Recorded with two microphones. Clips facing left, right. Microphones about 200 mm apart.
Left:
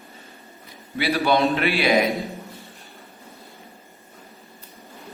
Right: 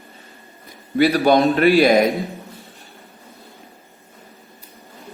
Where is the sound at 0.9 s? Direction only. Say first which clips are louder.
Right 6 dB; 45° right (ahead or behind).